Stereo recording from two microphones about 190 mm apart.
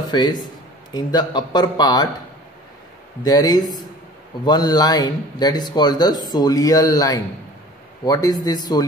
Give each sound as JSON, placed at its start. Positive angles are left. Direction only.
{"t": 0.0, "sound": "speech", "side_deg": 20}
{"t": 3.3, "sound": "speech", "side_deg": 20}